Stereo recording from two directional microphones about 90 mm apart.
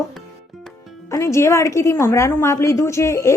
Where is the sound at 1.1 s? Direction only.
35° left (ahead or behind).